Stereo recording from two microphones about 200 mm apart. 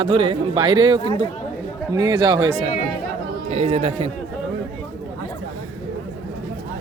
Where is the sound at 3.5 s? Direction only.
35° right (ahead or behind).